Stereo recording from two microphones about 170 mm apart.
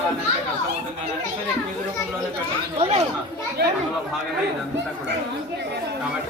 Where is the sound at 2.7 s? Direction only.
35° right (ahead or behind).